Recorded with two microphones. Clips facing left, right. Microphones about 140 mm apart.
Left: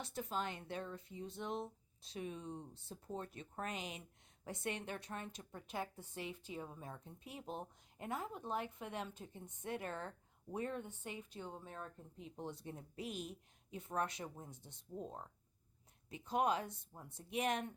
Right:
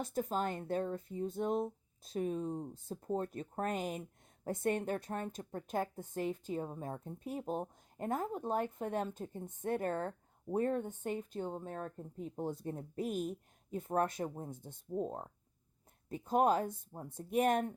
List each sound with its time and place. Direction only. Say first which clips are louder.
0.0 s a woman's voice: right 7 dB; 45° right (ahead or behind)